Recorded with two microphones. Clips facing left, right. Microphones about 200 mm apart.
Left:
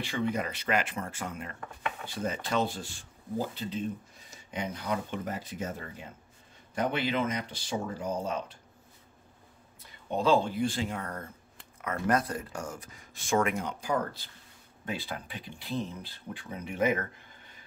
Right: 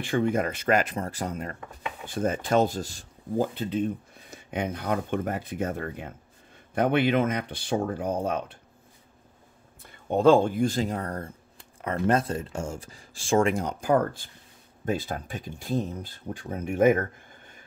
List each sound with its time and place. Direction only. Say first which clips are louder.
0.0 s speech: right 6 dB; 50° right (ahead or behind)
2.0 s speech: right 9 dB; 50° right (ahead or behind)
3.5 s speech: right 6 dB; 55° right (ahead or behind)
9.8 s speech: right 7 dB; 50° right (ahead or behind)